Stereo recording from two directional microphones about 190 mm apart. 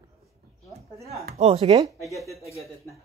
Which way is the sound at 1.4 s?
30° right (ahead or behind).